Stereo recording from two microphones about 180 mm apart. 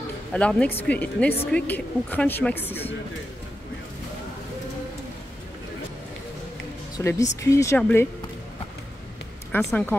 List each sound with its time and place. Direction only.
0.3 s speech: 5° left (ahead or behind)
7.0 s speech: 15° left (ahead or behind)
9.6 s speech: centre (ahead or behind)